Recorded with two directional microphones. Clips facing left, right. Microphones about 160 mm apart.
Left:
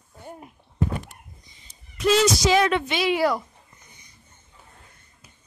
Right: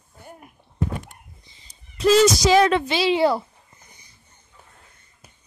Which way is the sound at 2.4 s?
35° right (ahead or behind).